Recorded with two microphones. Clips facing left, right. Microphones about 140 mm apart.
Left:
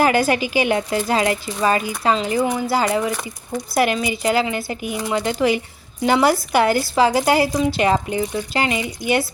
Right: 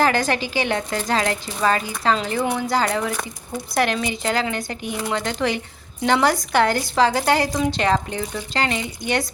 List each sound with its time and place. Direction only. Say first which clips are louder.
0.0 s speech: left 3 dB; 10° left (ahead or behind)